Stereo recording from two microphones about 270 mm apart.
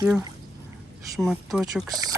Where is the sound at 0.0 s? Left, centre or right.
Centre.